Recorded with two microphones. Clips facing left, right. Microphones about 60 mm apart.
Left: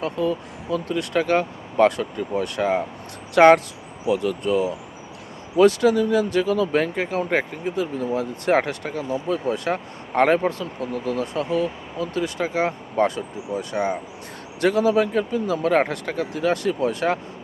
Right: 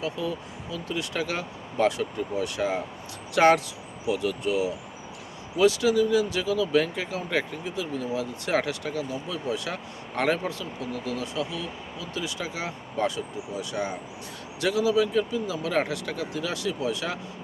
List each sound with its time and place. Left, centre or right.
0.0 s speech: left